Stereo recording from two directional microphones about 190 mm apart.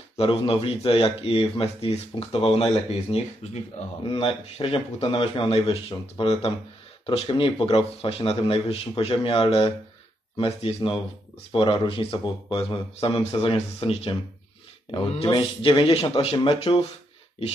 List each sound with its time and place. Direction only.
0.2 s speech: 30° left (ahead or behind)